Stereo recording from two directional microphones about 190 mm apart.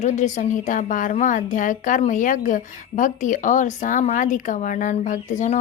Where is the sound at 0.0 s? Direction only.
40° left (ahead or behind).